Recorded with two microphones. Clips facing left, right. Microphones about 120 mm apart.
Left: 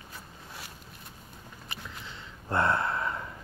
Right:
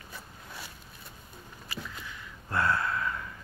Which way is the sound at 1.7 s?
25° left (ahead or behind).